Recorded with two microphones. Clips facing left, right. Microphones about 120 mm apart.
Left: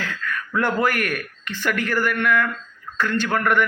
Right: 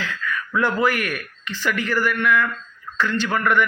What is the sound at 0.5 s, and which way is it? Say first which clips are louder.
A man's voice: right 1 dB; 50° left (ahead or behind).